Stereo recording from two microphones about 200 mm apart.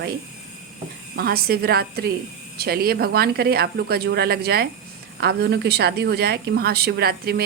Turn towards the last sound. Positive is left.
turn(degrees=-50)  # may be behind; listen again after turning